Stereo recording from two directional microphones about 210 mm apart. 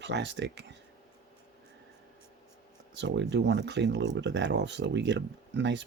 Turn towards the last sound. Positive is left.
turn(degrees=-60)  # may be behind; listen again after turning